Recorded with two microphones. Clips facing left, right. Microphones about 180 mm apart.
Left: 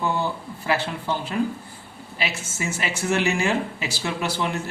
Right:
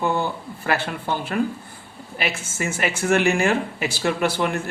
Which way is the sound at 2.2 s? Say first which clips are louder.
Right 2 dB; 55° right (ahead or behind).